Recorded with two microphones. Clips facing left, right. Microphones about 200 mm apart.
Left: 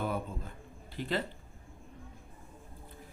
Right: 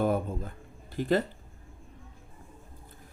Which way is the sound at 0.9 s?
45° right (ahead or behind).